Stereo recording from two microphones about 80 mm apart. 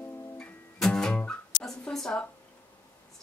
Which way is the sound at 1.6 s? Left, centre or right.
Centre.